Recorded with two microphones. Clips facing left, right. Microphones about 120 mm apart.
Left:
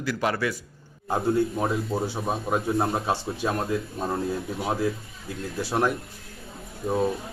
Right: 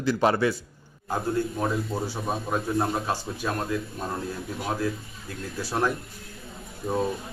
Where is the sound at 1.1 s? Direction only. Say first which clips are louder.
Left 3 dB; 15° left (ahead or behind).